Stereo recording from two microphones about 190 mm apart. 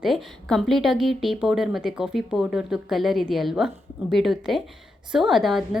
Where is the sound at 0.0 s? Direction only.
Centre (ahead or behind).